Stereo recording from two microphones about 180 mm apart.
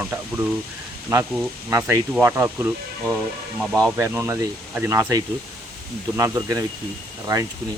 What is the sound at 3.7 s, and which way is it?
Speech, 15° right (ahead or behind).